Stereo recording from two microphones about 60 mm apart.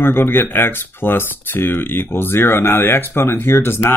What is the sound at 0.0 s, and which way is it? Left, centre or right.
Speech, left.